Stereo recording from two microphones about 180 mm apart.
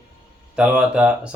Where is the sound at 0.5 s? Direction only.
5° right (ahead or behind).